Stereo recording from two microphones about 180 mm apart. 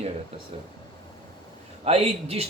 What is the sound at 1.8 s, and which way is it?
Speech, 35° right (ahead or behind).